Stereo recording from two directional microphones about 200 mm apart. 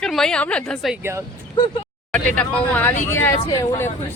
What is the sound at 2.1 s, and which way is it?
Speech, 5° left (ahead or behind).